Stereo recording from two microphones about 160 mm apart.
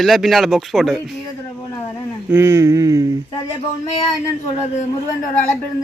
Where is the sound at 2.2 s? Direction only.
15° right (ahead or behind).